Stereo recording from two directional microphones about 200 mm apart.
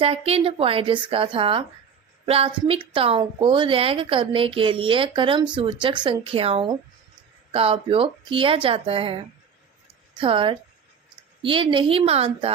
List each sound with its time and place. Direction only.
0.0 s a woman's voice: 30° right (ahead or behind)